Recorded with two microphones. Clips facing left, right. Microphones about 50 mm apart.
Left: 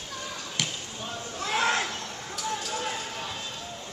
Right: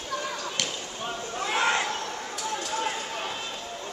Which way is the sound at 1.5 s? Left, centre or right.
Centre.